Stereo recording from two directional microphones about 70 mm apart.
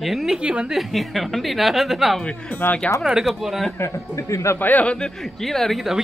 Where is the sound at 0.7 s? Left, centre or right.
Centre.